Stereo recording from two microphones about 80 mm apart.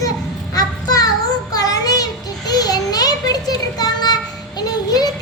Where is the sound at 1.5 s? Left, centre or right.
Left.